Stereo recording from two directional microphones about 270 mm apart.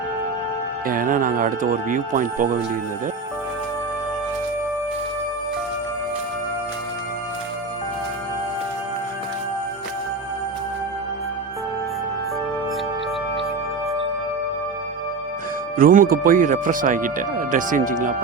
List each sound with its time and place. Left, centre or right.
0.9 s speech: right
15.8 s speech: right